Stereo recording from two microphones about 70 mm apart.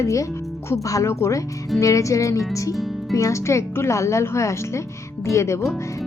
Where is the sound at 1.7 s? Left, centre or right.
Left.